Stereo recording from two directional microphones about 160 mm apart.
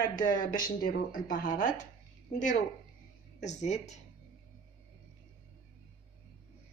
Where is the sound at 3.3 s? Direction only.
45° left (ahead or behind).